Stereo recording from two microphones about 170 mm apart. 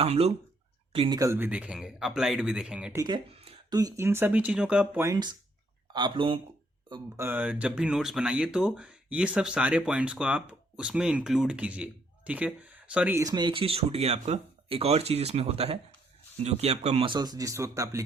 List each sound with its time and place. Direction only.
0.0 s speech: 40° right (ahead or behind)
1.2 s speech: 15° right (ahead or behind)
2.9 s speech: 20° right (ahead or behind)
7.2 s speech: 10° right (ahead or behind)